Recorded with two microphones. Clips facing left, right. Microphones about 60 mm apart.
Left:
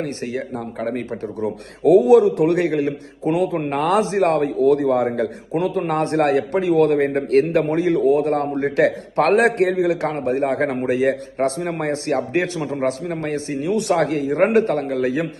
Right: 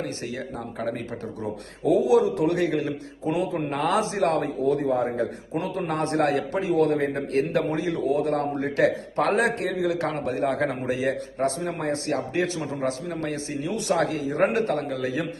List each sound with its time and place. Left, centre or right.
0.0 s a man's voice: left
1.8 s a man's voice: left
4.6 s a man's voice: left
9.1 s a man's voice: left